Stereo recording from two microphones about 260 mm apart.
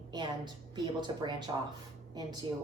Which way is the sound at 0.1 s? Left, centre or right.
Centre.